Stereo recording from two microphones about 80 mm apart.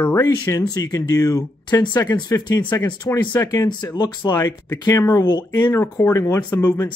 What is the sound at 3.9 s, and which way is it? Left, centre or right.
Speech, left.